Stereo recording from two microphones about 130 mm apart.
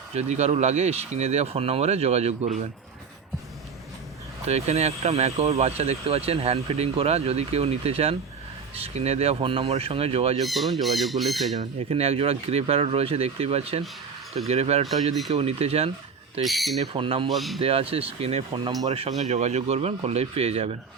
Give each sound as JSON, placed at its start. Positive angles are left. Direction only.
{"t": 0.1, "sound": "speech", "side_deg": -60}
{"t": 4.4, "sound": "speech", "side_deg": -55}
{"t": 10.4, "sound": "speech", "side_deg": 0}
{"t": 11.5, "sound": "speech", "side_deg": -55}
{"t": 16.4, "sound": "speech", "side_deg": 0}
{"t": 16.8, "sound": "speech", "side_deg": -45}
{"t": 17.2, "sound": "speech", "side_deg": 0}
{"t": 17.6, "sound": "speech", "side_deg": -50}
{"t": 18.5, "sound": "speech", "side_deg": -30}
{"t": 18.9, "sound": "speech", "side_deg": -55}